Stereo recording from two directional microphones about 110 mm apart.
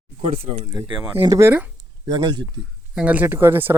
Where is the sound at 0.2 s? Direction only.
70° right (ahead or behind).